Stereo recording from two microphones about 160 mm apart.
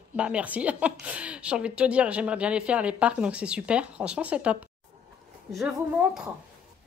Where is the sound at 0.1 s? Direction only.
10° right (ahead or behind).